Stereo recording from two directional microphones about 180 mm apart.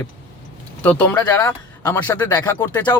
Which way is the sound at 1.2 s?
15° left (ahead or behind).